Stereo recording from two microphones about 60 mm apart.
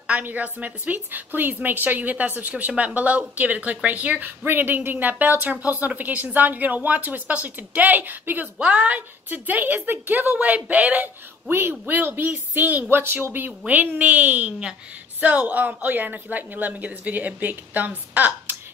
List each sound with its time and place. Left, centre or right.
0.0 s a woman's voice: right
8.5 s a woman's voice: centre